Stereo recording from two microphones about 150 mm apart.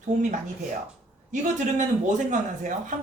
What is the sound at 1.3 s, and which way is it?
Speech, 55° right (ahead or behind).